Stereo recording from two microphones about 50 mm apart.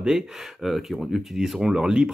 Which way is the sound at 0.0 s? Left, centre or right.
Centre.